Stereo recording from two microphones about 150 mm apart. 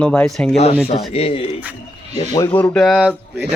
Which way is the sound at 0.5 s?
45° left (ahead or behind).